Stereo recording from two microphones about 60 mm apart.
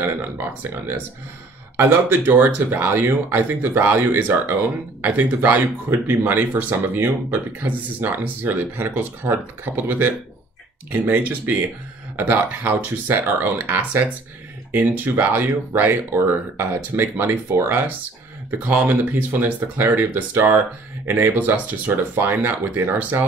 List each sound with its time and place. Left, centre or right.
0.0 s speech: right
5.0 s speech: right